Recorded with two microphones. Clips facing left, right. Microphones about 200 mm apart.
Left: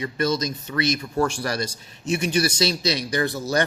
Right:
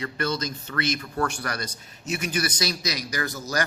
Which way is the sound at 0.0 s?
20° left (ahead or behind).